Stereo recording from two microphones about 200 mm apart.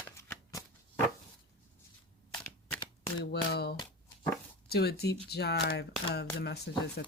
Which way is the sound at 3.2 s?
55° left (ahead or behind).